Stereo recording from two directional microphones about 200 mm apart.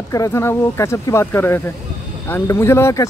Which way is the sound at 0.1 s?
15° left (ahead or behind).